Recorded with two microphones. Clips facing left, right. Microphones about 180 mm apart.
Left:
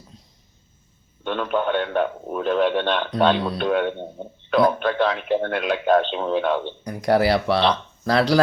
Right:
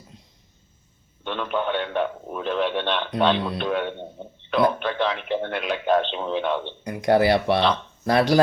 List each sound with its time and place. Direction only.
1.2 s speech: 45° left (ahead or behind)
7.0 s speech: 20° right (ahead or behind)